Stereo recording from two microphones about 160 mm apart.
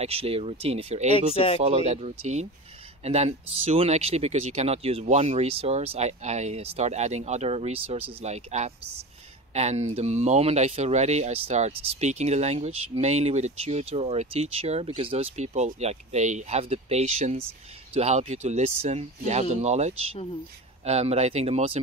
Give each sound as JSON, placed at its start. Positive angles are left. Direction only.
{"t": 0.0, "sound": "speech", "side_deg": -40}
{"t": 1.3, "sound": "speech", "side_deg": 35}
{"t": 1.6, "sound": "speech", "side_deg": -40}